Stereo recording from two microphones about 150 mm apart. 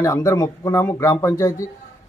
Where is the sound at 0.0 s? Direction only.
20° left (ahead or behind).